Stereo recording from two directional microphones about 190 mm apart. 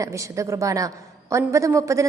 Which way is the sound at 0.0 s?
15° right (ahead or behind).